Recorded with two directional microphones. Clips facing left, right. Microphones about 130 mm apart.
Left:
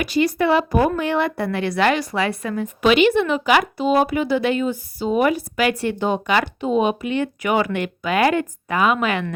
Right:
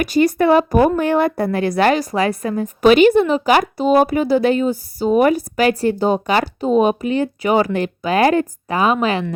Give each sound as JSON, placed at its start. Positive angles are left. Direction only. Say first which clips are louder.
{"t": 0.0, "sound": "a woman's voice", "louder": "right 4 dB", "side_deg": -45}